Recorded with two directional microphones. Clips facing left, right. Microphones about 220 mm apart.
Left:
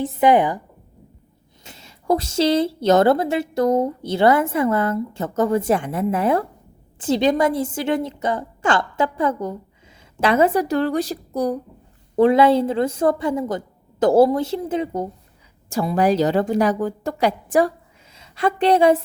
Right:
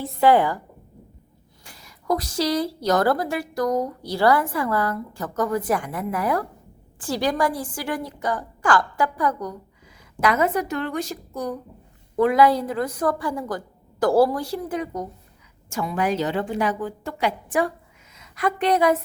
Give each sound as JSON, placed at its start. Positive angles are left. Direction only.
{"t": 0.0, "sound": "a woman's voice", "side_deg": 20}
{"t": 1.6, "sound": "a woman's voice", "side_deg": 25}